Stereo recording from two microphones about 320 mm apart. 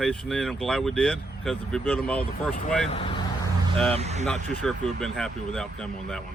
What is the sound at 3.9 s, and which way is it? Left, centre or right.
Speech, centre.